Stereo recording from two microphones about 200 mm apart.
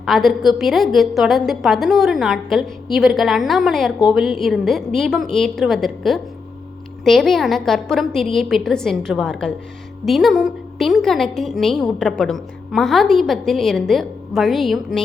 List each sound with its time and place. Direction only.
0.0 s a woman's voice: centre (ahead or behind)